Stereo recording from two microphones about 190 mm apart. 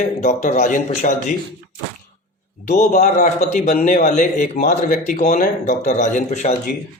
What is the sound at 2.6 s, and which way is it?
Speech, 45° left (ahead or behind).